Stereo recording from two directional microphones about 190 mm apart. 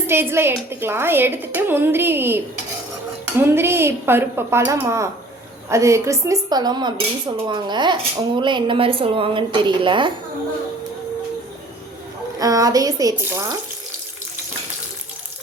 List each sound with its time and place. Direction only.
0.1 s a woman's voice: 10° right (ahead or behind)
12.4 s a woman's voice: 20° right (ahead or behind)